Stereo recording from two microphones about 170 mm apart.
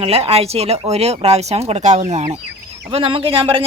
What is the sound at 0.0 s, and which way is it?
Speech, 35° right (ahead or behind).